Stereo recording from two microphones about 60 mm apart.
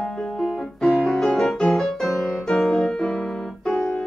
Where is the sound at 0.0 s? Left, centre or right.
Centre.